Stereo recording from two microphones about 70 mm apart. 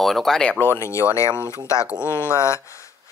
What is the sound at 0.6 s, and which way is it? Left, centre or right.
Speech, left.